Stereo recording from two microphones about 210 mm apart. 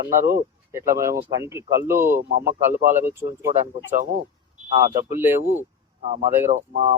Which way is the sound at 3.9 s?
40° right (ahead or behind).